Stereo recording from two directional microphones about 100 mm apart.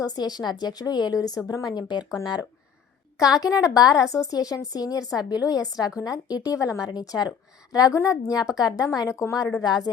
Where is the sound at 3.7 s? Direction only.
35° left (ahead or behind).